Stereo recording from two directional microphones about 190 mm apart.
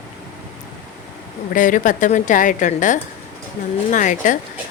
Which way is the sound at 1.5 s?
45° left (ahead or behind).